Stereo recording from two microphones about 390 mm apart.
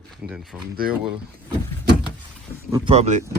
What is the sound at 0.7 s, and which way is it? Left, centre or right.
Speech, right.